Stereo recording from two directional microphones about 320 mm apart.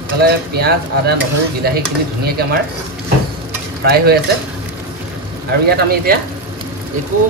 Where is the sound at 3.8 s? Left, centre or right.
Right.